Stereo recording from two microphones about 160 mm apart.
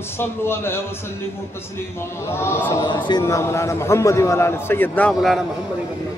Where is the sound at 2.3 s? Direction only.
15° left (ahead or behind).